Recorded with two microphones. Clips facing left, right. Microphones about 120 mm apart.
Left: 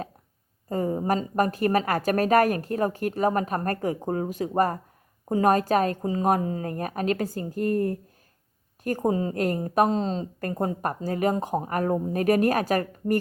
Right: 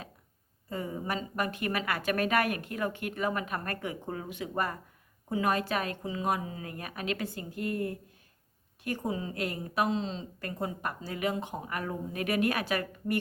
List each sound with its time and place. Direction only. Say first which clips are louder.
0.7 s a woman's voice: left 9 dB; 40° left (ahead or behind)